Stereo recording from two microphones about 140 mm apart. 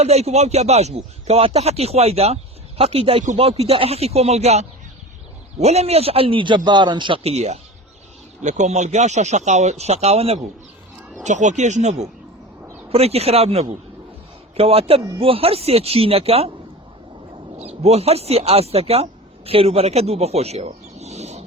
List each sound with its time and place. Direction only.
0.0 s speech: 50° right (ahead or behind)
11.2 s speech: 55° right (ahead or behind)
17.6 s speech: 50° right (ahead or behind)